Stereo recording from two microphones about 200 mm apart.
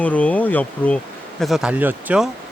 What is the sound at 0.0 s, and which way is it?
Speech, 5° left (ahead or behind).